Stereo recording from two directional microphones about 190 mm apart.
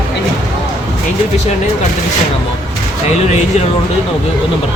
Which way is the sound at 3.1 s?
35° left (ahead or behind).